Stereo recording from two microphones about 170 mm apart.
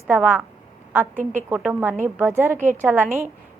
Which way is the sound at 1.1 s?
50° right (ahead or behind).